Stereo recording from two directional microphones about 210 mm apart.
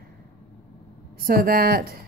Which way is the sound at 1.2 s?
45° right (ahead or behind).